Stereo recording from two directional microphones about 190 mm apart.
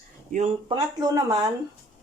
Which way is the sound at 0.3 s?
40° right (ahead or behind).